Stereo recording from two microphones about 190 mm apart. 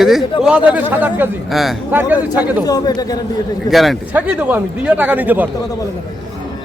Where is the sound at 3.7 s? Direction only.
Centre (ahead or behind).